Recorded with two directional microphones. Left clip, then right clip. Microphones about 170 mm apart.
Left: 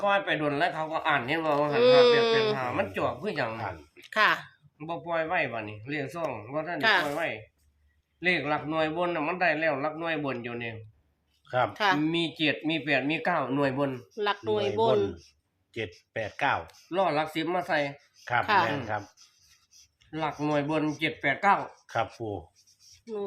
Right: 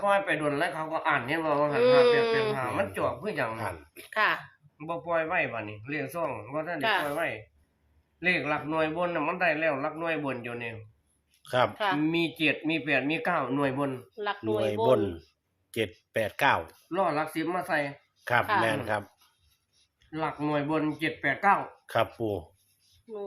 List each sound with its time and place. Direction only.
0.0 s speech: 15° left (ahead or behind)
3.6 s speech: 90° right
4.1 s speech: 25° left (ahead or behind)
4.8 s speech: 10° left (ahead or behind)
11.4 s speech: 90° right
11.7 s speech: 45° left (ahead or behind)
11.9 s speech: 10° left (ahead or behind)
14.2 s speech: 60° left (ahead or behind)
15.7 s speech: 90° right
16.9 s speech: 15° left (ahead or behind)
18.6 s speech: 90° right
20.1 s speech: 15° left (ahead or behind)
23.1 s speech: 55° left (ahead or behind)